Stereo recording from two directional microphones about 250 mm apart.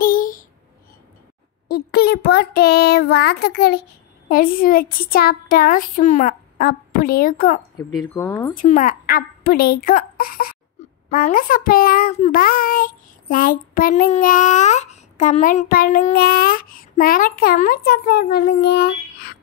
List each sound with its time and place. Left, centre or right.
0.0 s a sound: left
1.7 s a child's voice: left
7.7 s speech: centre
8.5 s a child's voice: left